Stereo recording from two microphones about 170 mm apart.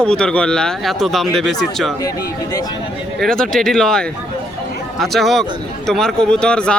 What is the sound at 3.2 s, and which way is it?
Speech, 5° left (ahead or behind).